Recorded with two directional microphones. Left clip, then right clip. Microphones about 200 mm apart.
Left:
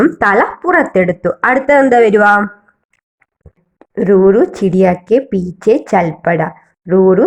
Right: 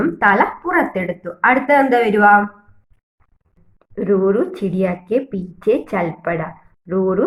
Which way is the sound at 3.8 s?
40° left (ahead or behind).